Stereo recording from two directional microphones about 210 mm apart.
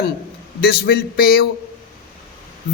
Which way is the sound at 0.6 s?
50° left (ahead or behind).